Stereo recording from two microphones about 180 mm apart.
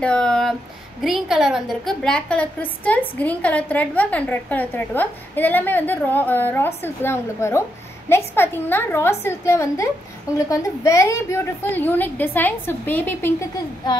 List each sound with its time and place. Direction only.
0.0 s a sound: 5° left (ahead or behind)
1.0 s a woman's voice: centre (ahead or behind)
13.8 s speech: 25° left (ahead or behind)